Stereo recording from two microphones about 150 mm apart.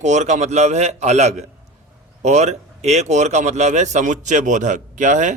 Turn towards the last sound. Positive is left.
turn(degrees=-55)  # may be behind; listen again after turning